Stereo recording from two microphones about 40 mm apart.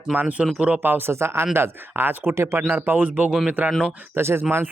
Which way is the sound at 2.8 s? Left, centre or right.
Right.